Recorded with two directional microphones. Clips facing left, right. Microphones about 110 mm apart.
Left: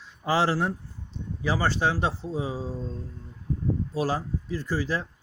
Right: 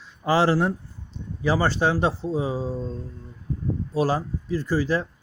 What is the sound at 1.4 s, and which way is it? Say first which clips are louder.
Speech: right 4 dB; 40° right (ahead or behind).